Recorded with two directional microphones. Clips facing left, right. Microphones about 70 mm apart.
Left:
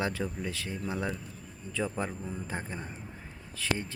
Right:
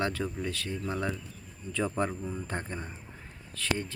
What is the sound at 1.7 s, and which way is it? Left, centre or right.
Speech, centre.